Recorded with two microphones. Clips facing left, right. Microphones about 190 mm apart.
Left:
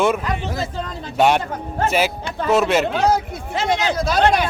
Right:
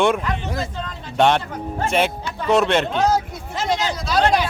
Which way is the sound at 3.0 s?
60° left (ahead or behind).